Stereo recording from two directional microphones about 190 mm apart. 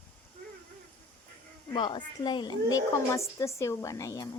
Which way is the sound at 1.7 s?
25° left (ahead or behind).